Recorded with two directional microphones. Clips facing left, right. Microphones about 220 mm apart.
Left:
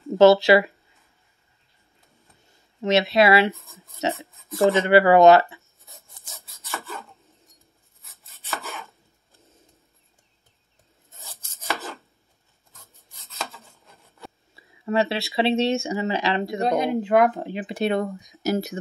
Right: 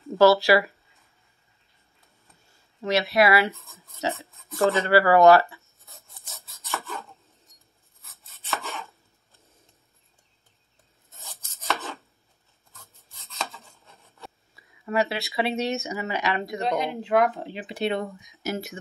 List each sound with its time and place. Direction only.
0.1 s speech: 20° left (ahead or behind)
2.5 s speech: 20° left (ahead or behind)
5.6 s writing: centre (ahead or behind)
5.9 s filing: 15° left (ahead or behind)
6.7 s rub: centre (ahead or behind)
11.2 s rub: centre (ahead or behind)
12.7 s rub: 15° left (ahead or behind)
13.1 s rub: centre (ahead or behind)
14.5 s speech: 25° left (ahead or behind)
16.6 s speech: 45° left (ahead or behind)